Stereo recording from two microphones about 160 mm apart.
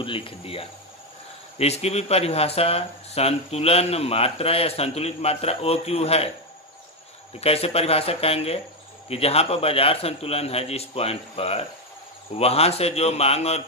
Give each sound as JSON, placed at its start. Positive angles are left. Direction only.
{"t": 0.0, "sound": "speech", "side_deg": 35}
{"t": 7.3, "sound": "speech", "side_deg": 40}